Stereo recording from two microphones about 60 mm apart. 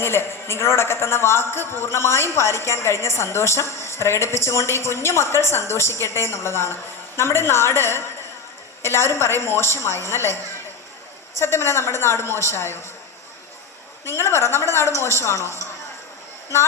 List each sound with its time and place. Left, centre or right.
0.0 s a man's voice: left
11.3 s a man's voice: left
14.0 s a man's voice: left